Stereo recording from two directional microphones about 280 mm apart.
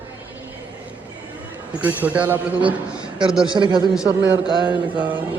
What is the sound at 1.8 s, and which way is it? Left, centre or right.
Speech, centre.